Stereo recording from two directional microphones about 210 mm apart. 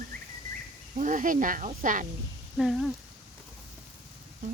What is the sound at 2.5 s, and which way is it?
Speech, centre (ahead or behind).